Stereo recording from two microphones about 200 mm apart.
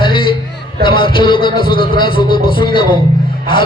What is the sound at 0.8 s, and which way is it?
Speech, 25° left (ahead or behind).